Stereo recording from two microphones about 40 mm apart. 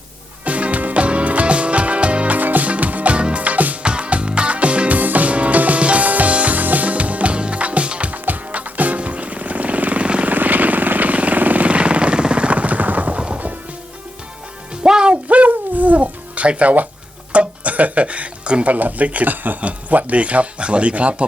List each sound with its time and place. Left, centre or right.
0.4 s music: right
3.2 s music: right
3.8 s music: right
4.9 s music: right
8.1 s music: right
10.2 s vehicle: right
13.2 s music: right
14.8 s music: right
15.3 s music: right
18.7 s speech: right